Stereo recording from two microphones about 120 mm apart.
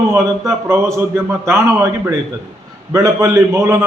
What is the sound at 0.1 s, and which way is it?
A man's voice, 25° right (ahead or behind).